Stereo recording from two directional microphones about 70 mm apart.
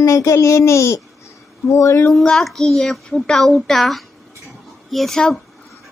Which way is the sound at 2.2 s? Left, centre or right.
Centre.